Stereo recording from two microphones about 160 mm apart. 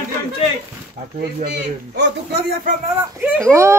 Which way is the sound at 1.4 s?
90° right.